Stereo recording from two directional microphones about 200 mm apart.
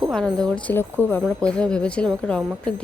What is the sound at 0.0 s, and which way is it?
Speech, centre (ahead or behind).